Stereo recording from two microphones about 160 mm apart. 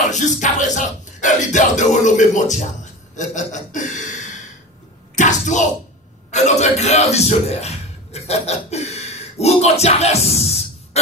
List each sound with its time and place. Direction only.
0.1 s speech: 50° left (ahead or behind)
5.1 s a man's voice: 50° left (ahead or behind)